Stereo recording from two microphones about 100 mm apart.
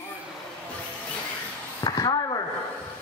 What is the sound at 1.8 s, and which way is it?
Speech, 40° left (ahead or behind).